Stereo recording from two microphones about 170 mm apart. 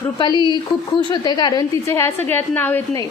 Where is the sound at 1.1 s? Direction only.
25° left (ahead or behind).